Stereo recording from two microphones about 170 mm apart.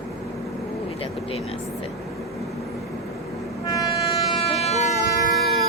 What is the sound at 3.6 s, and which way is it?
Train, 20° left (ahead or behind).